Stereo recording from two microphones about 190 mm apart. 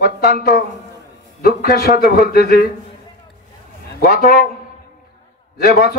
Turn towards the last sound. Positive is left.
turn(degrees=55)  # may be behind; listen again after turning